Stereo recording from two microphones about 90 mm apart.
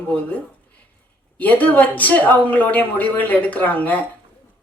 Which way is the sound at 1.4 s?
20° left (ahead or behind).